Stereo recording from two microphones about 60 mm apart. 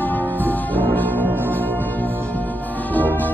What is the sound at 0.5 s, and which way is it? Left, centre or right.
Music, left.